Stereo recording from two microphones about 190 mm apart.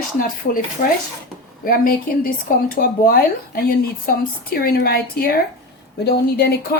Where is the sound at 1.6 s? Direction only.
50° left (ahead or behind).